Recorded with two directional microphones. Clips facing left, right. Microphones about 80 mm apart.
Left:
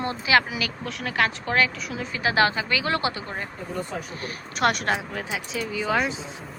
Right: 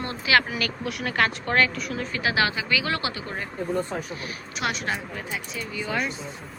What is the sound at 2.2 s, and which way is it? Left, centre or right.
Speech, left.